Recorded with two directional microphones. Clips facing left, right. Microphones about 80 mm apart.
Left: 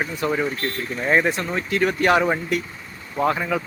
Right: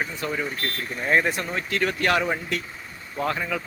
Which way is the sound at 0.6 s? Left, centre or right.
Centre.